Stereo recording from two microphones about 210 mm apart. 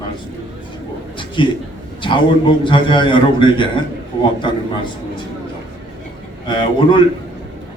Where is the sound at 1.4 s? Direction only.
25° left (ahead or behind).